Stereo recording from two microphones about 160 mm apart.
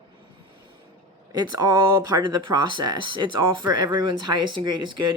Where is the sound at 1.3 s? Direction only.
25° right (ahead or behind).